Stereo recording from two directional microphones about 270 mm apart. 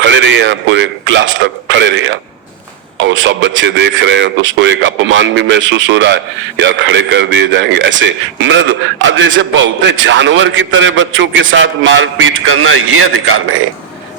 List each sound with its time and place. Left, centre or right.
0.0 s a man's voice: right